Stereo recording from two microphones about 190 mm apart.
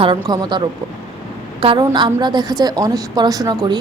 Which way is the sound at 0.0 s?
25° right (ahead or behind).